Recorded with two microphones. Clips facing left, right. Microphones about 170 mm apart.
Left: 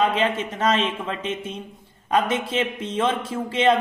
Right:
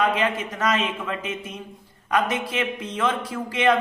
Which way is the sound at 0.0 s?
25° left (ahead or behind).